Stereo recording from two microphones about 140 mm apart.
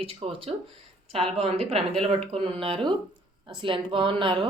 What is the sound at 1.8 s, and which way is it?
Speech, 5° left (ahead or behind).